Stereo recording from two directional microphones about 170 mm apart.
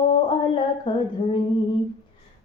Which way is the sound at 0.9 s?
25° left (ahead or behind).